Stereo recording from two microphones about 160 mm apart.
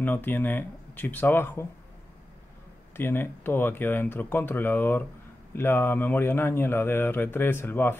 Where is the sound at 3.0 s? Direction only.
15° left (ahead or behind).